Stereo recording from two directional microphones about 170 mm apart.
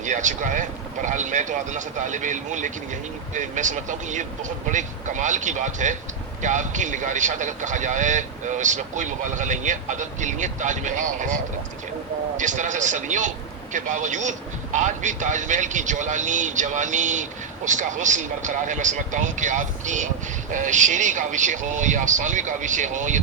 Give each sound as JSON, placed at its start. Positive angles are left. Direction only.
{"t": 0.0, "sound": "speech", "side_deg": -45}
{"t": 12.4, "sound": "speech", "side_deg": -45}